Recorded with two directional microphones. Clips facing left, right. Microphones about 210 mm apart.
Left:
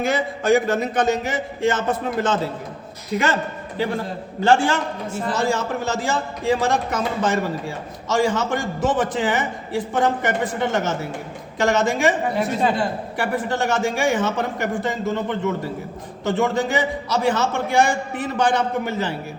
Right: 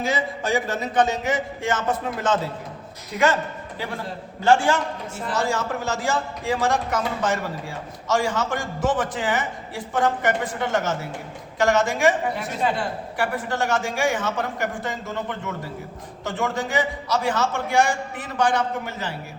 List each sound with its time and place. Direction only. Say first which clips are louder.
0.0 s speech: left 4 dB; 55° left (ahead or behind); by 2.4 s 30° left (ahead or behind)
4.4 s a woman's voice: left 1 dB; 30° left (ahead or behind)